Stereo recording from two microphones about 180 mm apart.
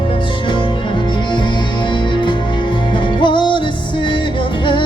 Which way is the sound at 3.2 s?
25° left (ahead or behind).